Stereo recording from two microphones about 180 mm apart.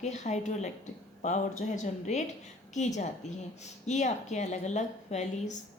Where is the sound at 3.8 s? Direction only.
40° left (ahead or behind).